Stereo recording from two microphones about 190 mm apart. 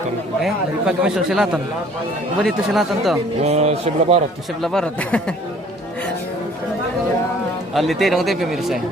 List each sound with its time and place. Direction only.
0.4 s speech: 5° right (ahead or behind)
3.4 s speech: 35° right (ahead or behind)
4.6 s speech: 5° left (ahead or behind)
7.7 s speech: centre (ahead or behind)